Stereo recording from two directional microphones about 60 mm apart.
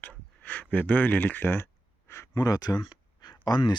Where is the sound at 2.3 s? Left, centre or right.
Left.